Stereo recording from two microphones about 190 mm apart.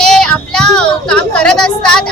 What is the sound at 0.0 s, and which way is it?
Child singing, 5° left (ahead or behind).